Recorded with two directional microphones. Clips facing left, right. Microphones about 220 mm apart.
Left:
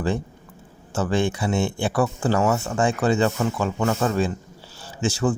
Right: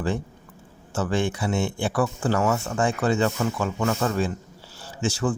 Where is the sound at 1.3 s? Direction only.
20° left (ahead or behind).